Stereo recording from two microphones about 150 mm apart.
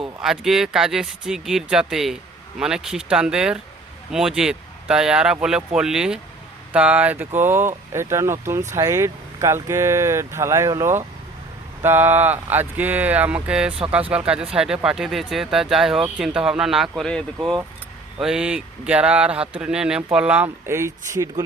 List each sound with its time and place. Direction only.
0.2 s speech: 5° right (ahead or behind); by 21.4 s 20° right (ahead or behind)